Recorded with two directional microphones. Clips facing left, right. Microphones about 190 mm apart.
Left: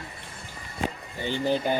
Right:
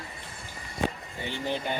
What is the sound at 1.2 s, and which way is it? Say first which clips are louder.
Speech: left 6 dB; 30° left (ahead or behind).